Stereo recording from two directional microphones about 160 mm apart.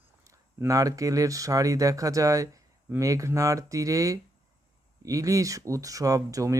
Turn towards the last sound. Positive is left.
turn(degrees=-20)  # may be behind; listen again after turning